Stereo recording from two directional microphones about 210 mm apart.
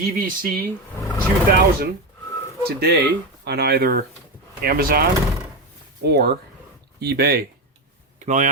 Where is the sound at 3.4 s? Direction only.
50° right (ahead or behind).